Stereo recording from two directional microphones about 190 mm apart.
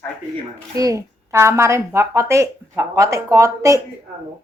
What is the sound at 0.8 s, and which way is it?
Speech, 15° right (ahead or behind).